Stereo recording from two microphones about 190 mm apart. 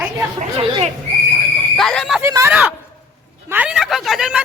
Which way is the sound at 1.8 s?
Centre (ahead or behind).